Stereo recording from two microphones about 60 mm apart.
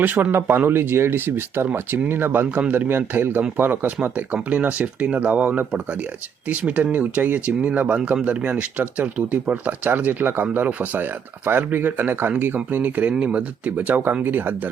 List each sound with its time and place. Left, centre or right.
0.0 s speech: right
2.6 s speech: right
2.8 s speech: right